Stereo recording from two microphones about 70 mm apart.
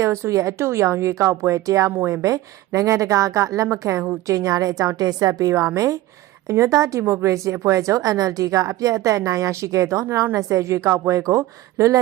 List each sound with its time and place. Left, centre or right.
0.0 s a woman's voice: right